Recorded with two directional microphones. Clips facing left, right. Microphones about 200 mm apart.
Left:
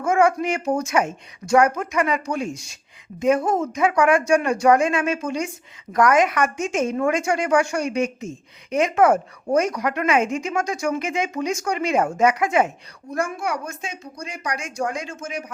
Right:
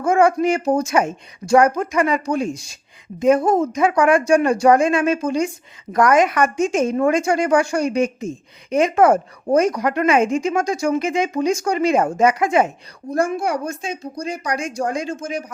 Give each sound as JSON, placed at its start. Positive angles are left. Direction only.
{"t": 0.0, "sound": "speech", "side_deg": -35}